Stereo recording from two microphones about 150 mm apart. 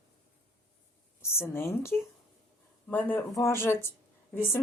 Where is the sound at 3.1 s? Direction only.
20° left (ahead or behind).